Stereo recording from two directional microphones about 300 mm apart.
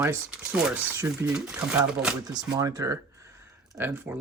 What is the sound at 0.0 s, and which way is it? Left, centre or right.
Speech, centre.